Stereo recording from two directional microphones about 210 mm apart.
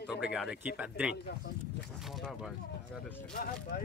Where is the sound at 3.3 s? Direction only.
45° left (ahead or behind).